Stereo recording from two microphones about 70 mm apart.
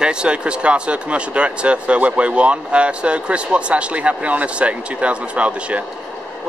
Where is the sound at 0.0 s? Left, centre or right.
Centre.